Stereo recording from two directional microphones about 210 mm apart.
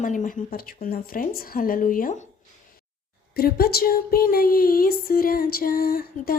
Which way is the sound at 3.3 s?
45° left (ahead or behind).